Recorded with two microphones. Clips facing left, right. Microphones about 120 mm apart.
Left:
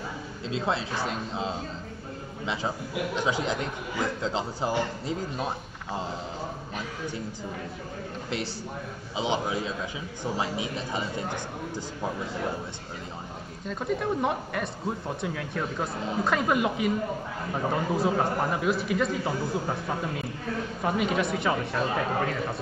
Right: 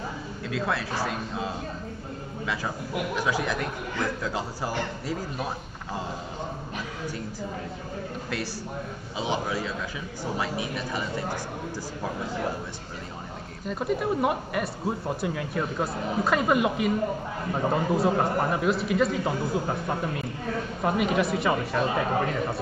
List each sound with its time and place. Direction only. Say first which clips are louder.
0.5 s a man's voice: even; 25° left (ahead or behind)
9.1 s a man's voice: left 1 dB; 20° left (ahead or behind)
13.7 s a man's voice: right 2 dB; 5° right (ahead or behind)